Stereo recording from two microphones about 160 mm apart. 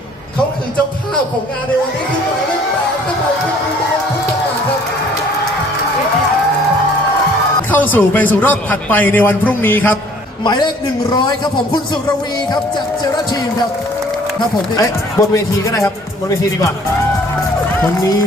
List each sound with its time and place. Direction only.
7.7 s a man's voice: 10° left (ahead or behind)
10.4 s a man's voice: 25° left (ahead or behind)
14.8 s a man's voice: 20° left (ahead or behind)